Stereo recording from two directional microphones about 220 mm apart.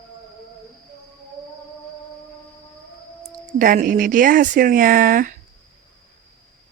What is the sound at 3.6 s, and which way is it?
Speech, 40° right (ahead or behind).